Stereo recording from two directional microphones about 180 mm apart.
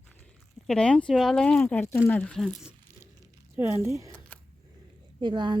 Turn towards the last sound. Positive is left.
turn(degrees=-25)  # may be behind; listen again after turning